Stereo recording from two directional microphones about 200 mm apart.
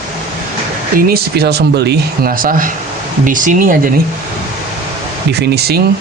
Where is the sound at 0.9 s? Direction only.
50° right (ahead or behind).